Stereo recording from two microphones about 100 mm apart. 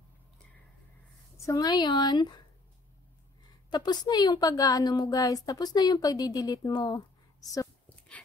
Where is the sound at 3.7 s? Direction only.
45° left (ahead or behind).